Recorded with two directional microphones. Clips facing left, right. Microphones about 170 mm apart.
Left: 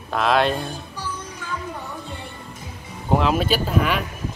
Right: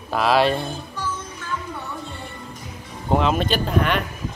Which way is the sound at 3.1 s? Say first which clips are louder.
Even; centre (ahead or behind).